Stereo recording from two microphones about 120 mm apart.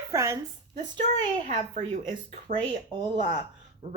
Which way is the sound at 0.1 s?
25° right (ahead or behind).